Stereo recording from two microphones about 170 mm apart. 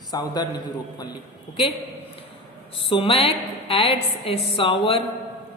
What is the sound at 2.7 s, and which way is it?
A woman's voice, 30° left (ahead or behind).